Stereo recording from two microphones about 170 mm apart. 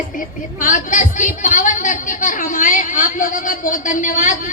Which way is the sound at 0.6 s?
50° left (ahead or behind).